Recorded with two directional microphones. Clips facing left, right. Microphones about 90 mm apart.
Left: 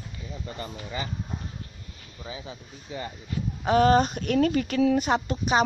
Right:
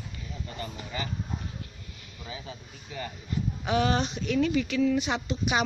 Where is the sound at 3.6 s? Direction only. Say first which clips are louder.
Left 7 dB; 40° left (ahead or behind).